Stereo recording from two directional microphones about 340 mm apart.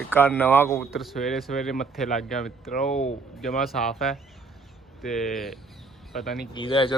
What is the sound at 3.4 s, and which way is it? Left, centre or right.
A man's voice, centre.